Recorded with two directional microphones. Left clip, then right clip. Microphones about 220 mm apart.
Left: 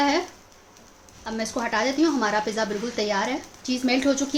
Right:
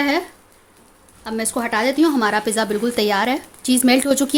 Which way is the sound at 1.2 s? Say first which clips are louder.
Right 4 dB; 40° right (ahead or behind).